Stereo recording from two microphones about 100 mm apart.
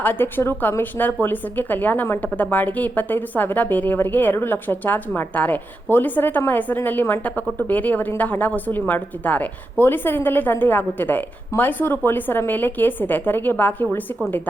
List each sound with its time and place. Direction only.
0.0 s a woman's voice: 20° left (ahead or behind)